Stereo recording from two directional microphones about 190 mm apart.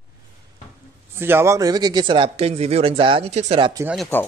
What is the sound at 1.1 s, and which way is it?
Speech, 10° right (ahead or behind).